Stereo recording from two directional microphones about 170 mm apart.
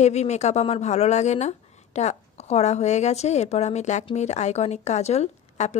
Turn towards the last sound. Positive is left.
turn(degrees=40)  # may be behind; listen again after turning